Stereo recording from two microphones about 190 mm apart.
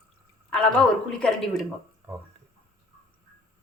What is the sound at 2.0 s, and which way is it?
Speech, 15° right (ahead or behind).